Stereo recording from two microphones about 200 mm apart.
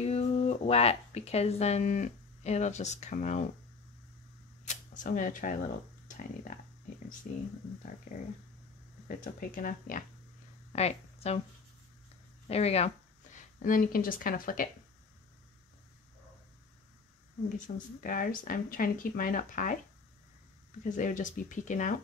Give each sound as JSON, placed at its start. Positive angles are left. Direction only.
{"t": 0.0, "sound": "speech", "side_deg": 30}
{"t": 4.6, "sound": "speech", "side_deg": 40}
{"t": 9.0, "sound": "speech", "side_deg": 45}
{"t": 10.7, "sound": "speech", "side_deg": 30}
{"t": 12.4, "sound": "speech", "side_deg": 30}
{"t": 13.6, "sound": "speech", "side_deg": 40}
{"t": 17.6, "sound": "speech", "side_deg": 40}
{"t": 20.8, "sound": "speech", "side_deg": 40}